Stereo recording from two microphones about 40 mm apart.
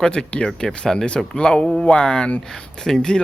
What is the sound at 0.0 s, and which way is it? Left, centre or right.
Speech, left.